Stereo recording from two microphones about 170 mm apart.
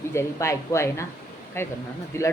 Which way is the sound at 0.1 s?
15° left (ahead or behind).